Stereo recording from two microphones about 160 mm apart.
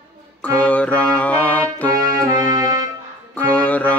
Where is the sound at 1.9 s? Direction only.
20° right (ahead or behind).